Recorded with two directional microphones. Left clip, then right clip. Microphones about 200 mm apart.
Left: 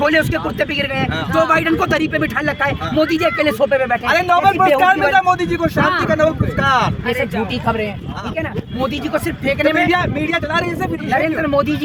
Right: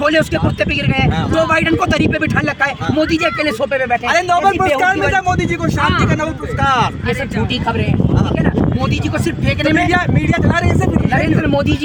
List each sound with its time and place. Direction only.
0.0 s speech: 5° left (ahead or behind)
4.1 s speech: 25° right (ahead or behind)